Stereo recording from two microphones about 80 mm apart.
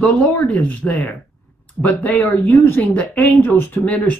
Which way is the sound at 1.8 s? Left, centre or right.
Centre.